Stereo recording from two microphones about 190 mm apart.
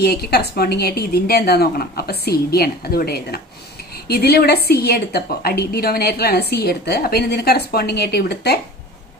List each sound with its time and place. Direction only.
0.0 s a woman's voice: 55° left (ahead or behind)